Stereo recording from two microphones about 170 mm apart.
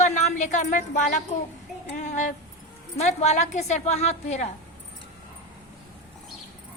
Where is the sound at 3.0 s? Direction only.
40° left (ahead or behind).